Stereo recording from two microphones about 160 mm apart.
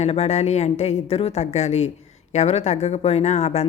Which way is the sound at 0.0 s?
40° left (ahead or behind).